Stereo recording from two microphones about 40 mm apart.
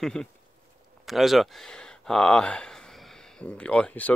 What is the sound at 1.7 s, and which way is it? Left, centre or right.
Speech, centre.